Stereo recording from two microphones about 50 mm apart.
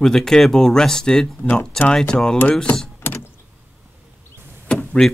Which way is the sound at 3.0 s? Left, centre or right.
Left.